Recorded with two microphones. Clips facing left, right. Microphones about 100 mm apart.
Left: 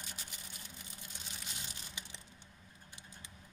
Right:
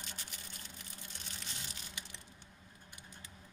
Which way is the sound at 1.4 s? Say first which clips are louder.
Even; 15° left (ahead or behind).